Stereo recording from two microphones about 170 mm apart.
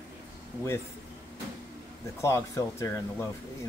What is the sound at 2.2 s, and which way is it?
Speech, 20° left (ahead or behind).